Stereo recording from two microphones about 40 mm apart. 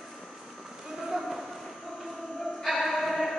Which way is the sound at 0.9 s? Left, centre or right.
Centre.